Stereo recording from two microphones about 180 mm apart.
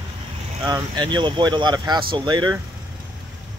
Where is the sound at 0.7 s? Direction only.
20° right (ahead or behind).